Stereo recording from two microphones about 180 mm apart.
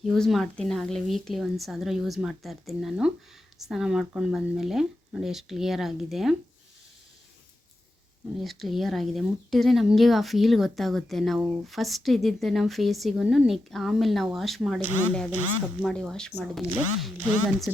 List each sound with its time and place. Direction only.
0.0 s speech: centre (ahead or behind)
8.4 s speech: centre (ahead or behind)